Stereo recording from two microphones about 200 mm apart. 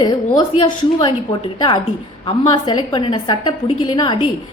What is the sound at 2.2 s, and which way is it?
A woman's voice, 20° left (ahead or behind).